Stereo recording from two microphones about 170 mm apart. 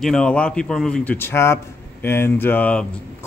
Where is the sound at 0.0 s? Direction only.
5° left (ahead or behind).